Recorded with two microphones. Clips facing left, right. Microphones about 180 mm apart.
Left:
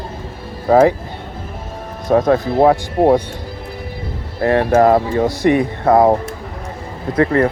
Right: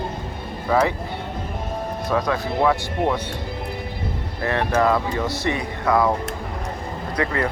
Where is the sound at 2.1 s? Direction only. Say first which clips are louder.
Left 10 dB; 45° left (ahead or behind).